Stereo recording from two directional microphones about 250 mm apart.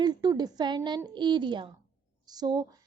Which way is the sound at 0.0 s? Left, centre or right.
Centre.